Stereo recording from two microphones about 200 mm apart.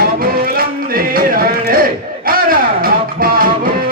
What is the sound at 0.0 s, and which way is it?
Music, 45° right (ahead or behind).